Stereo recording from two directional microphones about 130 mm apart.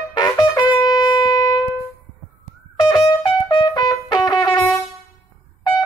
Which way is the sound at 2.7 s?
35° left (ahead or behind).